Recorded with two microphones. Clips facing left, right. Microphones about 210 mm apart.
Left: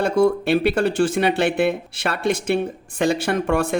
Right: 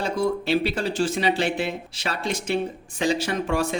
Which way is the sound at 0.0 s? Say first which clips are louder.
Left 7 dB; 55° left (ahead or behind).